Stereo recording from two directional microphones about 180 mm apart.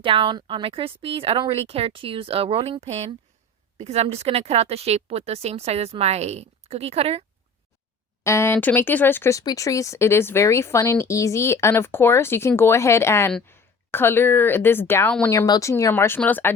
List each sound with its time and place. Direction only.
0.0 s a woman's voice: 30° right (ahead or behind)
8.2 s speech: 15° left (ahead or behind)